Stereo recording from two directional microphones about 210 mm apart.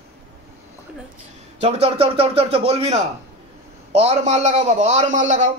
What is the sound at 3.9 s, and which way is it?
A man's voice, 30° right (ahead or behind).